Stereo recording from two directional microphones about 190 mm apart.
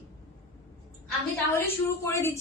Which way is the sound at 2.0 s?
15° left (ahead or behind).